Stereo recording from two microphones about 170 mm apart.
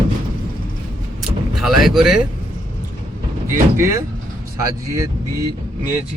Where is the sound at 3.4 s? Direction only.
15° right (ahead or behind).